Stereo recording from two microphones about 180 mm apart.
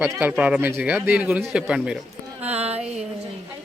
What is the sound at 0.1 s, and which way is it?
Speech, 10° right (ahead or behind).